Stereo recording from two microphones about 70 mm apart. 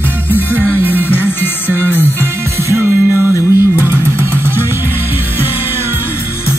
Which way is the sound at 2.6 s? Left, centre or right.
Right.